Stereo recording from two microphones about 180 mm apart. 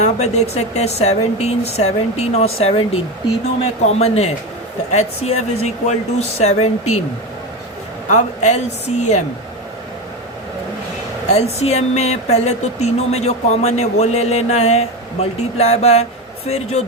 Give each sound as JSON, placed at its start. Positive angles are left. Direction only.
{"t": 0.0, "sound": "speech", "side_deg": 40}
{"t": 8.1, "sound": "speech", "side_deg": 40}
{"t": 11.6, "sound": "speech", "side_deg": 35}